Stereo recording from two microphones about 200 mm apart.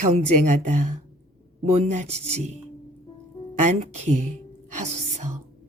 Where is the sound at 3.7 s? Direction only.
35° right (ahead or behind).